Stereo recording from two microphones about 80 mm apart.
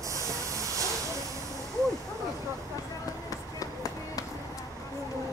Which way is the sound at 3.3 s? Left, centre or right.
Left.